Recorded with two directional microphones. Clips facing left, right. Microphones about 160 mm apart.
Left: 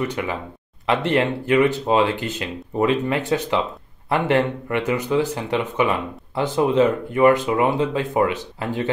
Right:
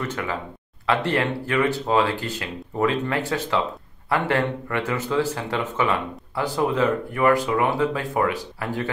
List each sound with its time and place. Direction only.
0.0 s speech: 15° left (ahead or behind)